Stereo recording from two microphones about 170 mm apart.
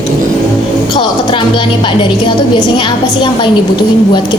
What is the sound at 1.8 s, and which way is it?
A woman's voice, 30° left (ahead or behind).